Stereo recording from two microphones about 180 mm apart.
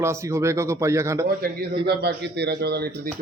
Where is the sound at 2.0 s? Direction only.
70° right (ahead or behind).